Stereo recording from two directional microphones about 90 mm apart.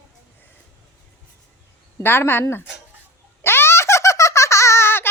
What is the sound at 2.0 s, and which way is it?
Speech, 25° left (ahead or behind).